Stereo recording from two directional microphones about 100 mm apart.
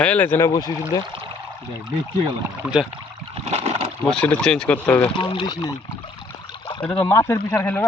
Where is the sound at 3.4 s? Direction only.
90° right.